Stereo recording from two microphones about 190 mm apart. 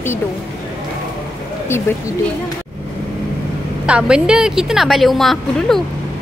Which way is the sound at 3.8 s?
5° right (ahead or behind).